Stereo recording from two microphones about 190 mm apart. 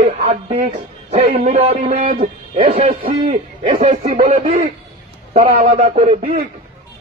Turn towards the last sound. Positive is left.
turn(degrees=-45)  # may be behind; listen again after turning